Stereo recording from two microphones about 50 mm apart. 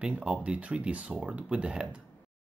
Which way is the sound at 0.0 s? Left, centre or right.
Right.